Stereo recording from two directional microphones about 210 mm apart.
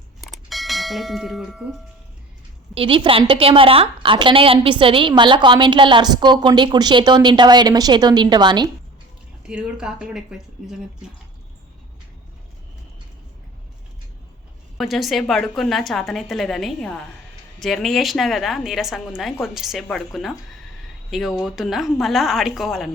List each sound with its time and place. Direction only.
0.2 s bell: centre (ahead or behind)
2.7 s a woman's voice: 25° right (ahead or behind)
9.5 s a woman's voice: 5° right (ahead or behind)
14.8 s a woman's voice: centre (ahead or behind)